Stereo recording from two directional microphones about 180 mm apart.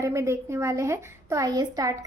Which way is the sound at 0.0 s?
15° right (ahead or behind).